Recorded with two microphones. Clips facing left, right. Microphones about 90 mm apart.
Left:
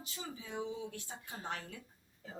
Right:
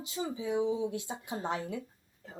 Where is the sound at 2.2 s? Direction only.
Centre (ahead or behind).